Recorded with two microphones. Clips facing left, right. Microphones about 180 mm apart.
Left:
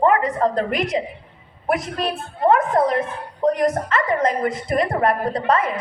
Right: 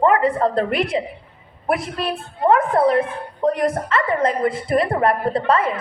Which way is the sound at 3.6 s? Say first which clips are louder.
Even; 30° right (ahead or behind).